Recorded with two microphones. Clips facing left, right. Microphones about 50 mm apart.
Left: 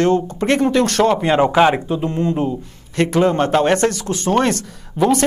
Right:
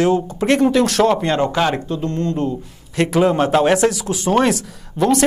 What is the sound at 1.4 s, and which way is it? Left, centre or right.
Speech, centre.